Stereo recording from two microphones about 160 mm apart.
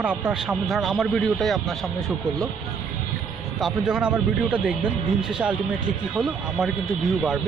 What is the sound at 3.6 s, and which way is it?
Speech, 5° right (ahead or behind).